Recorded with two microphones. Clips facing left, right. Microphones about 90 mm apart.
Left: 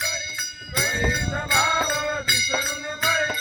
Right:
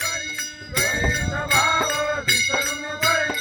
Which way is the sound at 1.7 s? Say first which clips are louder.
Right 2 dB; 15° left (ahead or behind).